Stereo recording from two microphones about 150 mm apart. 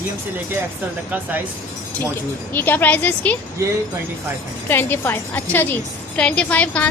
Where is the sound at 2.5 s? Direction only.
15° left (ahead or behind).